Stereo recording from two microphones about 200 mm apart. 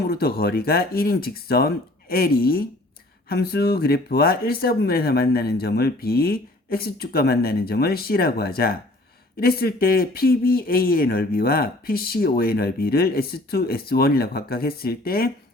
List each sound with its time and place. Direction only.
0.1 s a man's voice: 50° left (ahead or behind)